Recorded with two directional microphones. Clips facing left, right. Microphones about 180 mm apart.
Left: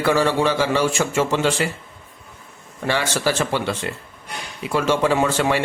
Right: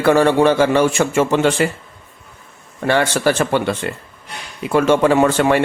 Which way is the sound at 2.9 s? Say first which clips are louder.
Right 5 dB; 55° right (ahead or behind).